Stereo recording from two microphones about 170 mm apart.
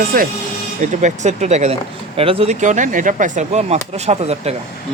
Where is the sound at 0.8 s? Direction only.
45° right (ahead or behind).